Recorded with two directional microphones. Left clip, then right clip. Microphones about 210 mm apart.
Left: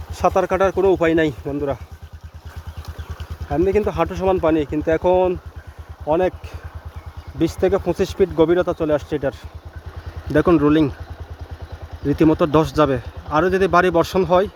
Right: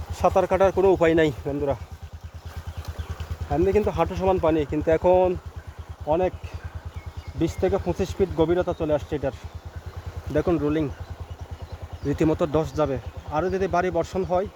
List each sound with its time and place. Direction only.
0.1 s speech: 25° left (ahead or behind)
1.5 s speech: 20° left (ahead or behind)
3.5 s speech: 15° left (ahead or behind)
6.1 s speech: 40° left (ahead or behind)
7.3 s speech: 45° left (ahead or behind)
10.3 s speech: 30° left (ahead or behind)
12.0 s speech: 20° left (ahead or behind); by 14.4 s 40° left (ahead or behind)